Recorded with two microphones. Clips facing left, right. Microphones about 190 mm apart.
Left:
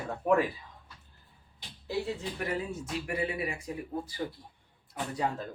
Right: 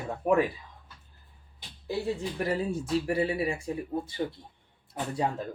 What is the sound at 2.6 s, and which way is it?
Speech, 35° right (ahead or behind).